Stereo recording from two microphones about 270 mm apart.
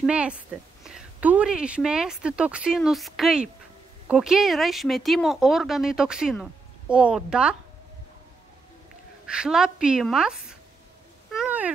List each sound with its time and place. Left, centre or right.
0.0 s speech: centre
9.3 s speech: centre
11.3 s a sound: centre